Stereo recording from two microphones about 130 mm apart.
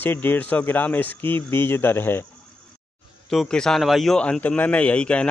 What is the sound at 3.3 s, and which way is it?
A man's voice, 5° left (ahead or behind).